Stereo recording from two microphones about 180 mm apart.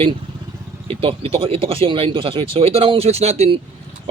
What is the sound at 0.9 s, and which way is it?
Speech, 30° right (ahead or behind).